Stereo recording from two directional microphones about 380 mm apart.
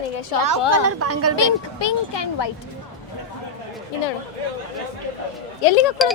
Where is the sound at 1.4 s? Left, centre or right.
Left.